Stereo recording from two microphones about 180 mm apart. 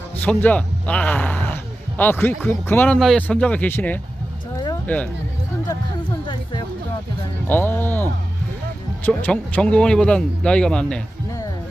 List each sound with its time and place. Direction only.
0.2 s a man's voice: 10° left (ahead or behind)
4.5 s a sound: 20° left (ahead or behind)
7.4 s a man's voice: 10° left (ahead or behind)